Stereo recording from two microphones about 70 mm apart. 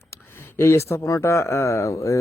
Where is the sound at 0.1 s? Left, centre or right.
Left.